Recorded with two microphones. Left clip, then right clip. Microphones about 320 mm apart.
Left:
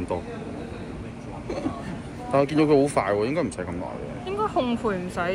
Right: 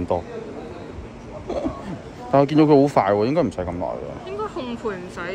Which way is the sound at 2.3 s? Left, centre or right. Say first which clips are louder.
Right 5 dB; right.